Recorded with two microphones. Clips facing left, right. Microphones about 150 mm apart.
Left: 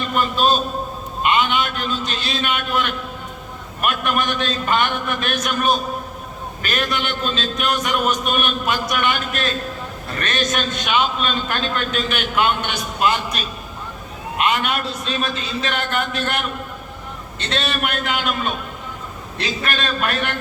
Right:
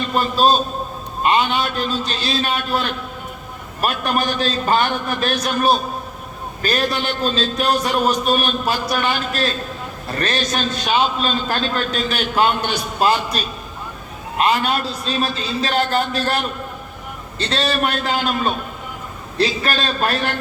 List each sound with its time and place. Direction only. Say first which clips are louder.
0.1 s a man's voice: right 2 dB; 35° right (ahead or behind)